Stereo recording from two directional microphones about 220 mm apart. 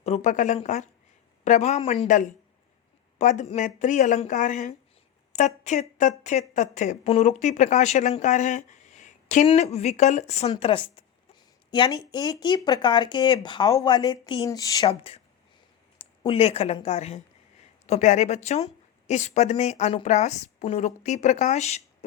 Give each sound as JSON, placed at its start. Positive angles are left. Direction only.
{"t": 0.0, "sound": "a woman's voice", "side_deg": 30}